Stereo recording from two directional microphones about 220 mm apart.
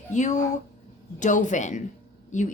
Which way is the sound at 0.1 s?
35° left (ahead or behind).